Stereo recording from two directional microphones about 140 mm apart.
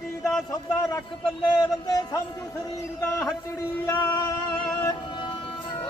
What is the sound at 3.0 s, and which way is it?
Speech, 20° left (ahead or behind).